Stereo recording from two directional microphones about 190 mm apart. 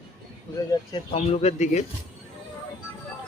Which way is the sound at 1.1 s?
35° left (ahead or behind).